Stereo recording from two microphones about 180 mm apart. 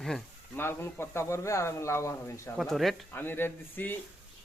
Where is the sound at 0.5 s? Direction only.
10° left (ahead or behind).